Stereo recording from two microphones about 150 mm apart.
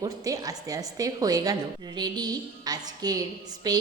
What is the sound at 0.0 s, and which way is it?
A woman's voice, 25° right (ahead or behind).